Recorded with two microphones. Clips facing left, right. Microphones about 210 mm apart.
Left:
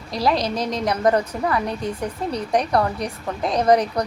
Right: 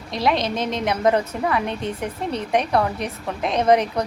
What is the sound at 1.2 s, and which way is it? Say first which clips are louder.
Speech: even; 5° right (ahead or behind).